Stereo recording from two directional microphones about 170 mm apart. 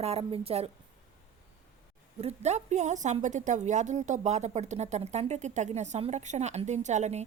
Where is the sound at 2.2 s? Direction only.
40° right (ahead or behind).